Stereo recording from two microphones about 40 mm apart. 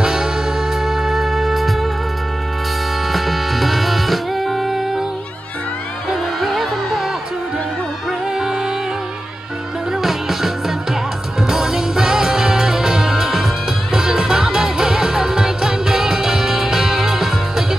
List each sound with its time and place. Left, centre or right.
0.0 s music: centre
0.7 s music: centre
3.1 s music: centre
6.4 s music: centre
8.4 s music: centre
10.0 s music: centre